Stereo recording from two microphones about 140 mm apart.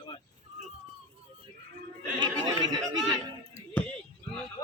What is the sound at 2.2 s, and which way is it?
Speech, 30° right (ahead or behind).